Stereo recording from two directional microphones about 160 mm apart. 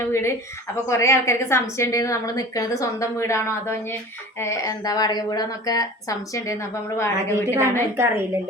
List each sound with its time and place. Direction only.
0.0 s a woman's voice: 15° left (ahead or behind)
7.9 s a woman's voice: 15° right (ahead or behind)